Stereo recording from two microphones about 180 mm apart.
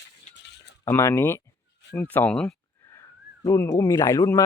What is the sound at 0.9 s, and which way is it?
Speech, 15° left (ahead or behind).